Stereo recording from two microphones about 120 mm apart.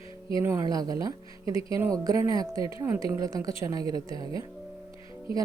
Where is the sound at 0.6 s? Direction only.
30° right (ahead or behind).